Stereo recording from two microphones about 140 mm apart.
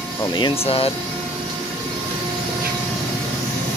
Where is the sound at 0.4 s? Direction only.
45° left (ahead or behind).